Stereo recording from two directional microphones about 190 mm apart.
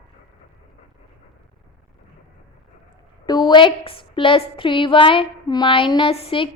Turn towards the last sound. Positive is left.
turn(degrees=30)  # may be behind; listen again after turning